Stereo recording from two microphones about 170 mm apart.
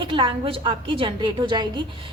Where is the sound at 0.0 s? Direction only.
30° right (ahead or behind).